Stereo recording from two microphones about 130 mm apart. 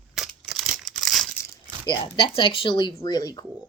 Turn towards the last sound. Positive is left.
turn(degrees=30)  # may be behind; listen again after turning